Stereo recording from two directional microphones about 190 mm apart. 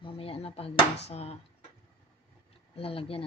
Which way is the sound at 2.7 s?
30° left (ahead or behind).